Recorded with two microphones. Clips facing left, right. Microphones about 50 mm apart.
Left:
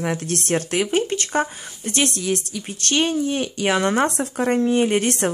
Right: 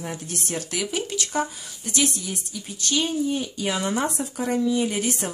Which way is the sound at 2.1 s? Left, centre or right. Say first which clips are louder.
Left 9 dB; left.